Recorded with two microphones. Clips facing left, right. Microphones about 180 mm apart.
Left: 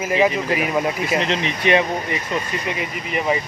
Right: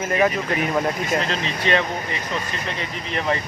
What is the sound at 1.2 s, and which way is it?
Speech, 20° left (ahead or behind).